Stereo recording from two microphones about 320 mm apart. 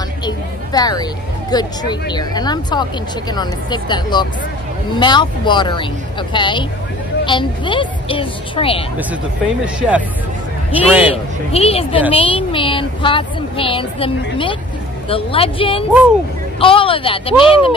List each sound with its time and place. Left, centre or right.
0.7 s speech: centre
9.8 s a man's voice: centre
11.5 s speech: centre